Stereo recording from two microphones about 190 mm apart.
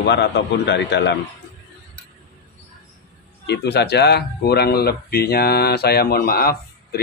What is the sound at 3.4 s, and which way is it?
Speech, 60° left (ahead or behind).